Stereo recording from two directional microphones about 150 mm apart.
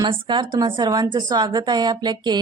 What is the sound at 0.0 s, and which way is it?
Speech, 30° right (ahead or behind).